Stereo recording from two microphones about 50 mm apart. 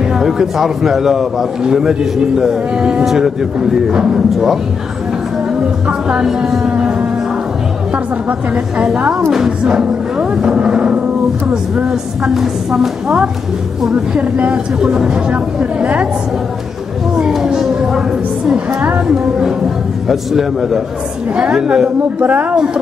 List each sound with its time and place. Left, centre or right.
0.2 s a man's voice: centre
3.9 s a woman's voice: right
5.9 s a woman's voice: centre
7.9 s a woman's voice: right
12.4 s a man's voice: centre
14.1 s a woman's voice: right
17.3 s a sound: centre
19.0 s a man's voice: centre
21.5 s a man's voice: centre
22.2 s speech: right